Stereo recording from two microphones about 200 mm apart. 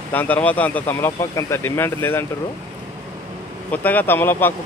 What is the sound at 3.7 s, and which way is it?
Speech, 10° left (ahead or behind).